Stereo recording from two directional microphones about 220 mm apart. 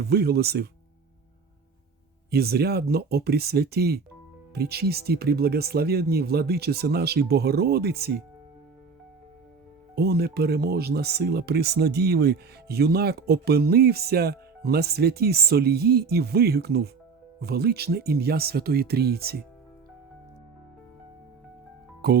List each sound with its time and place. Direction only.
0.0 s speech: 45° right (ahead or behind)
2.3 s speech: 45° right (ahead or behind)
9.9 s speech: 45° right (ahead or behind)
22.0 s speech: 45° right (ahead or behind)